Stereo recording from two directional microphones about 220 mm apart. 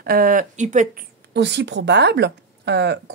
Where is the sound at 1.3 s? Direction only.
50° right (ahead or behind).